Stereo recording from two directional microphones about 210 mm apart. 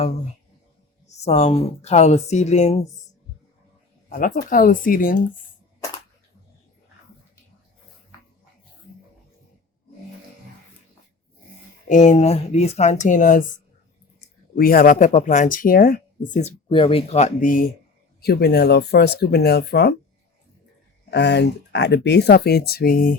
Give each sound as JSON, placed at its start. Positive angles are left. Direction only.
{"t": 1.0, "sound": "speech", "side_deg": 30}
{"t": 4.4, "sound": "speech", "side_deg": 40}
{"t": 11.9, "sound": "speech", "side_deg": 35}
{"t": 14.5, "sound": "speech", "side_deg": 45}
{"t": 16.6, "sound": "speech", "side_deg": 25}
{"t": 21.1, "sound": "speech", "side_deg": 55}